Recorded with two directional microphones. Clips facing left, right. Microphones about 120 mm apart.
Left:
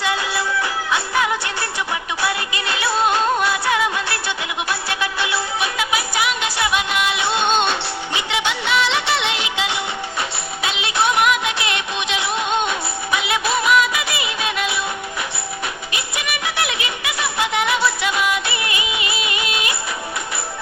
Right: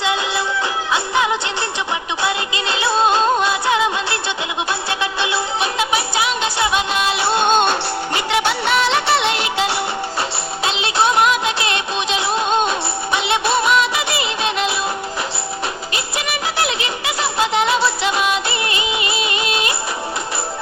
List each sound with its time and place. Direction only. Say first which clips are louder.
0.0 s music: right 2 dB; 25° right (ahead or behind)
15.9 s music: right 3 dB; 35° right (ahead or behind)